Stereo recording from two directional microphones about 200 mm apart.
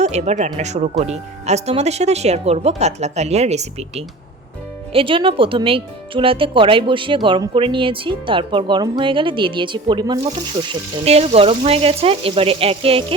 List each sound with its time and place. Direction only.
0.0 s speech: 35° right (ahead or behind)